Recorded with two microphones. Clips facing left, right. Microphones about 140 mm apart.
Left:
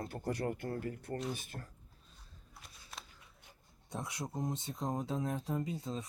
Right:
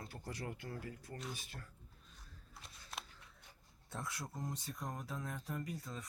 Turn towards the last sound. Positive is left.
turn(degrees=25)  # may be behind; listen again after turning